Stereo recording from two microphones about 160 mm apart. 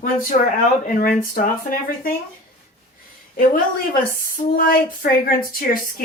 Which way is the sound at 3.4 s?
60° left (ahead or behind).